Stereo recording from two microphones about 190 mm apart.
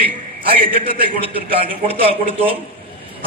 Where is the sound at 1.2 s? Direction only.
30° right (ahead or behind).